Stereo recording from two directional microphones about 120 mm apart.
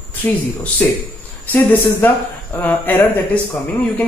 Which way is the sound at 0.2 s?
20° left (ahead or behind).